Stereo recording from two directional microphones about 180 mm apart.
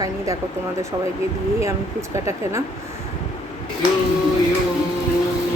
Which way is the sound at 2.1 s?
15° right (ahead or behind).